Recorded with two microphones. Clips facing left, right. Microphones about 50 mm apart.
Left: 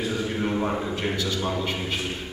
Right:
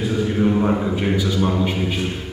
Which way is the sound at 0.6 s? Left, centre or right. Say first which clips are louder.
Right 7 dB; centre.